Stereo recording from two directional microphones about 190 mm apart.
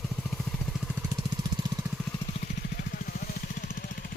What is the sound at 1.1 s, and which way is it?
Vehicle, 20° right (ahead or behind).